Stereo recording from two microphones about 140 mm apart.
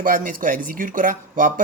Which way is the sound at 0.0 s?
80° right.